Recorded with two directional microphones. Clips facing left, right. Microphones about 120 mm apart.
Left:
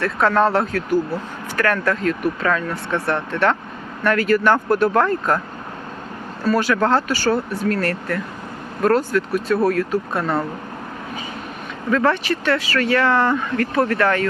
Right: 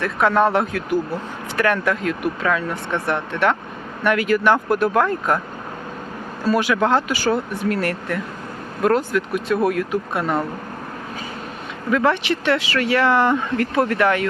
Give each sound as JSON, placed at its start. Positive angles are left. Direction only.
{"t": 0.0, "sound": "speech", "side_deg": -15}
{"t": 6.4, "sound": "speech", "side_deg": -15}
{"t": 11.9, "sound": "speech", "side_deg": -15}